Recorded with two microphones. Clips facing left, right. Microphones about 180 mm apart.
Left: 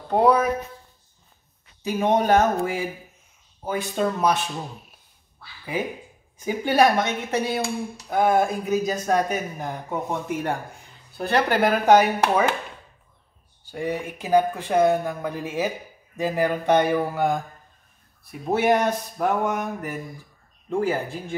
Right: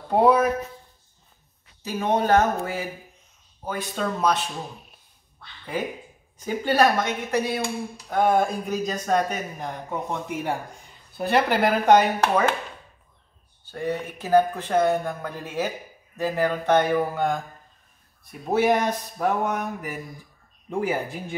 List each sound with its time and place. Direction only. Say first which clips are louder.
0.1 s speech: even; 5° right (ahead or behind)
1.9 s speech: left 2 dB; 15° left (ahead or behind)
5.4 s quack: left 2 dB; 5° left (ahead or behind)
6.4 s speech: left 1 dB; 15° left (ahead or behind)
8.1 s speech: left 1 dB; 5° left (ahead or behind)
13.7 s speech: left 1 dB; 10° left (ahead or behind)
18.5 s speech: left 1 dB; centre (ahead or behind)
20.8 s speech: even; 10° right (ahead or behind)